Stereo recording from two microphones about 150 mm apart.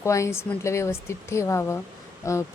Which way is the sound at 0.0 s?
20° left (ahead or behind).